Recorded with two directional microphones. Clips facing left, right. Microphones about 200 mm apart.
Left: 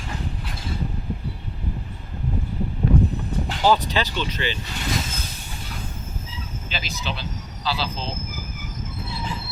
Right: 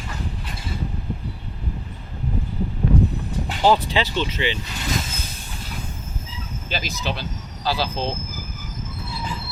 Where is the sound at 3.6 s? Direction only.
25° right (ahead or behind).